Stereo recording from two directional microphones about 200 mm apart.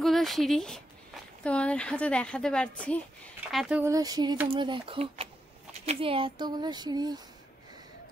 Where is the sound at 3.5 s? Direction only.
5° right (ahead or behind); by 7.2 s 20° right (ahead or behind).